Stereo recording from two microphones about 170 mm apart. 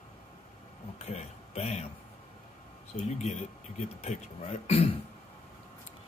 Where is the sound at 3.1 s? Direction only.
40° left (ahead or behind).